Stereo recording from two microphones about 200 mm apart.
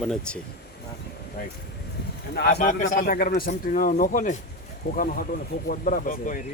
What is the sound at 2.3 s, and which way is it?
Speech, 55° left (ahead or behind).